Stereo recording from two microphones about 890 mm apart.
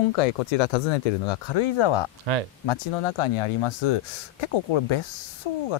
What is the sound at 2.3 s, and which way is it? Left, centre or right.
Speech, right.